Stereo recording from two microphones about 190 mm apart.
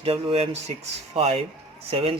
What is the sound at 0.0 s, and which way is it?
Speech, 30° right (ahead or behind).